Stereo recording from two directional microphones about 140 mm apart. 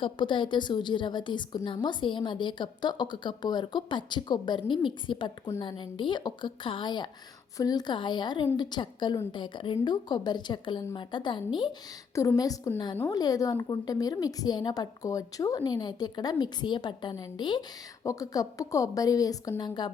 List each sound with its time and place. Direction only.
0.0 s a woman's voice: 35° left (ahead or behind)